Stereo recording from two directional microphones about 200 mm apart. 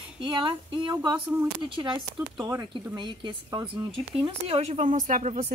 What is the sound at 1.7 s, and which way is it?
A woman's voice, 25° right (ahead or behind).